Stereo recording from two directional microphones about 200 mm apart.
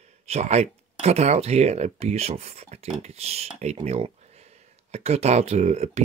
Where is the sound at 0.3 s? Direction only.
35° right (ahead or behind).